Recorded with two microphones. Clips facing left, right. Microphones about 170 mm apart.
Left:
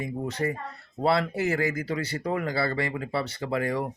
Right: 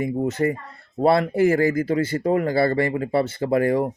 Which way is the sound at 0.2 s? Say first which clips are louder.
Right 5 dB; 50° right (ahead or behind).